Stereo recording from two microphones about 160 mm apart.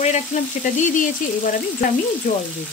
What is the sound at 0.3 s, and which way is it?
Speech, 50° left (ahead or behind).